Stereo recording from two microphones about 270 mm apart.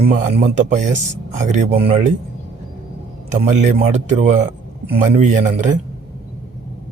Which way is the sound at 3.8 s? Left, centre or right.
Right.